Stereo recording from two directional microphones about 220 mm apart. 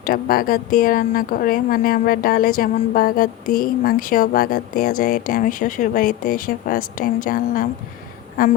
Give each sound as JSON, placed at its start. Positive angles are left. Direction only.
{"t": 0.0, "sound": "speech", "side_deg": 40}